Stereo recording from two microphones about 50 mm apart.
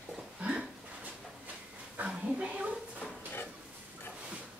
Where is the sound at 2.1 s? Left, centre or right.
Right.